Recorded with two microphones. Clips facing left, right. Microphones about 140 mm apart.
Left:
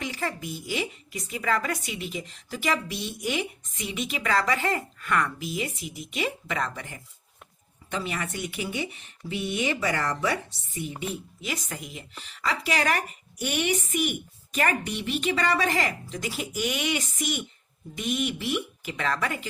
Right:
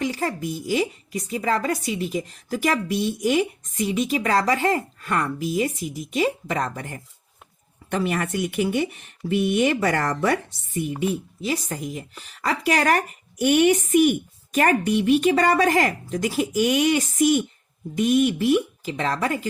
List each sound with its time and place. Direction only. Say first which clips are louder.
0.0 s a woman's voice: right 6 dB; 40° right (ahead or behind)
11.4 s speech: right 8 dB; 35° right (ahead or behind)
18.8 s a woman's voice: right 4 dB; 30° right (ahead or behind)